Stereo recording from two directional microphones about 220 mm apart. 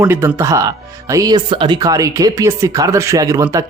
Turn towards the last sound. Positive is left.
turn(degrees=-15)  # may be behind; listen again after turning